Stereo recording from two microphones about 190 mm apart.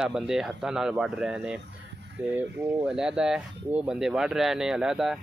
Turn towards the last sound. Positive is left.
turn(degrees=0)  # may be behind; listen again after turning